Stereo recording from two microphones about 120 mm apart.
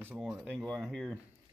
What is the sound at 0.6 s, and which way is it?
Speech, 5° left (ahead or behind).